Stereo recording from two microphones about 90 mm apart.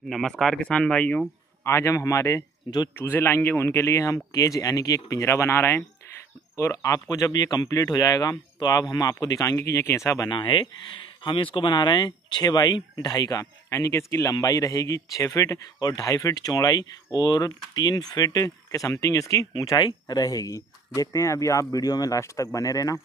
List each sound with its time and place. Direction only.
0.1 s speech: 5° left (ahead or behind)
1.6 s speech: 30° left (ahead or behind)
3.0 s speech: 25° left (ahead or behind)
10.3 s speech: 65° left (ahead or behind)
11.2 s speech: 75° left (ahead or behind); by 23.0 s 40° left (ahead or behind)